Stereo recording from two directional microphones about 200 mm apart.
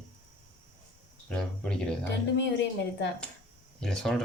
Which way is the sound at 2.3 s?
60° left (ahead or behind).